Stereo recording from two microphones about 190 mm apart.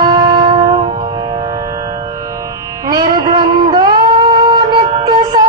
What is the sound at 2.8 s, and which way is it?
Music, 20° right (ahead or behind).